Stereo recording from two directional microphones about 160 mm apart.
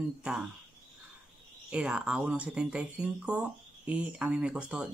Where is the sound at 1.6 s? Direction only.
5° right (ahead or behind).